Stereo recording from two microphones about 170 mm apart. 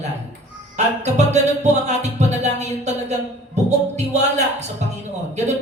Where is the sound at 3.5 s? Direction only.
40° right (ahead or behind).